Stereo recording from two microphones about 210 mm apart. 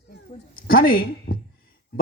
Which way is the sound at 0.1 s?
45° left (ahead or behind).